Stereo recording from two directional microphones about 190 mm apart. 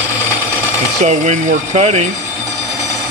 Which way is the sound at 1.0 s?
40° right (ahead or behind).